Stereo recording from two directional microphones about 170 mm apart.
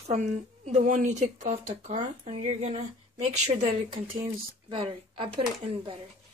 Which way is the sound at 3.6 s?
25° right (ahead or behind).